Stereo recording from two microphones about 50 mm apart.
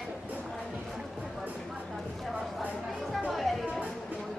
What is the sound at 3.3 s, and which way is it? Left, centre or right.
Chatter, centre.